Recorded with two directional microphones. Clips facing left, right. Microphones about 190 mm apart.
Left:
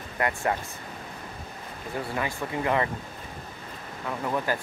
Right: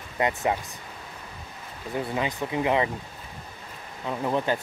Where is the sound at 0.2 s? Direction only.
20° right (ahead or behind).